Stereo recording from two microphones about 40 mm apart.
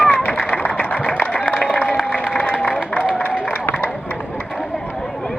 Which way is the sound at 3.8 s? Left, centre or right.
Left.